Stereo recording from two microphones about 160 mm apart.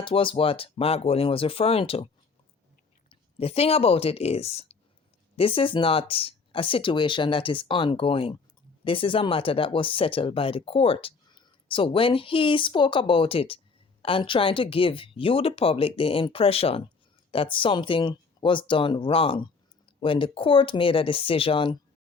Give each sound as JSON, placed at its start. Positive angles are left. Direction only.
{"t": 0.0, "sound": "speech", "side_deg": 35}
{"t": 3.1, "sound": "speech", "side_deg": 40}